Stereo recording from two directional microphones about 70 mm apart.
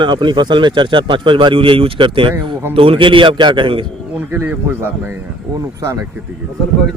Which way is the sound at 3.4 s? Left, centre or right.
Right.